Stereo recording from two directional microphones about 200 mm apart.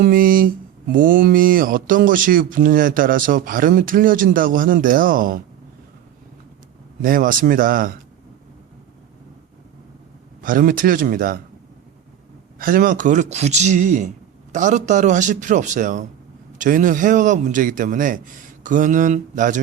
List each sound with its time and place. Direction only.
0.0 s speech: 45° right (ahead or behind)
7.0 s speech: 45° right (ahead or behind)
10.4 s speech: 45° right (ahead or behind)
12.5 s speech: 45° right (ahead or behind)